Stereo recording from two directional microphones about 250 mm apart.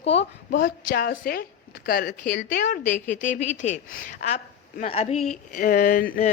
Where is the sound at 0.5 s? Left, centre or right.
Left.